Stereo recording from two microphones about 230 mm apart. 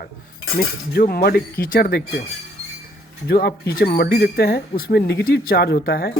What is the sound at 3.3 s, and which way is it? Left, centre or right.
Speech, left.